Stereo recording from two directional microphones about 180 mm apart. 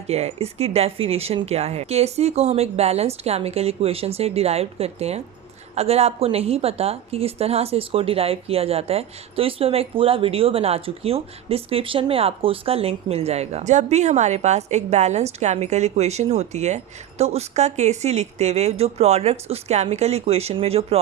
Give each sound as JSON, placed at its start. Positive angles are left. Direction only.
{"t": 0.1, "sound": "a woman's voice", "side_deg": -35}